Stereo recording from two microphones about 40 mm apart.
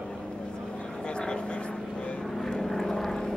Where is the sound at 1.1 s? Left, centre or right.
Left.